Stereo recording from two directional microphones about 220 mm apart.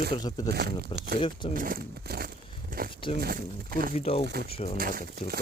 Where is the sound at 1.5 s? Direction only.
40° right (ahead or behind).